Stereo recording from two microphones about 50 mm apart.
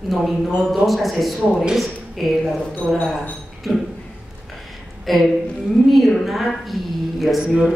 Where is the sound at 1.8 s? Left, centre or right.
Centre.